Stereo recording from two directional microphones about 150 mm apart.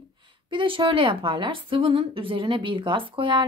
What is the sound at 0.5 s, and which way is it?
A woman's voice, 35° right (ahead or behind).